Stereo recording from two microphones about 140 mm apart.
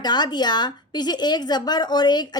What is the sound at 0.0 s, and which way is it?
Female singing, 30° left (ahead or behind).